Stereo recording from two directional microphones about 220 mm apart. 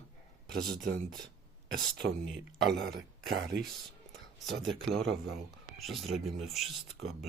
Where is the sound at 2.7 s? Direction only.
50° right (ahead or behind).